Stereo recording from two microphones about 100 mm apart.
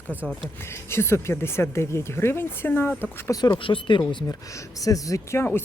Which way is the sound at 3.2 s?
35° left (ahead or behind).